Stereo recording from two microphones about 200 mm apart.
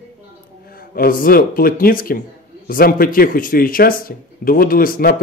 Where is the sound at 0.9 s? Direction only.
45° left (ahead or behind).